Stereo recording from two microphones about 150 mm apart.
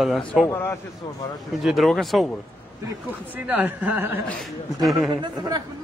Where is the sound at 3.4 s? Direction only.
10° right (ahead or behind).